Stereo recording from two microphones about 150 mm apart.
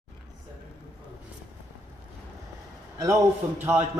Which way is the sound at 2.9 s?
20° right (ahead or behind).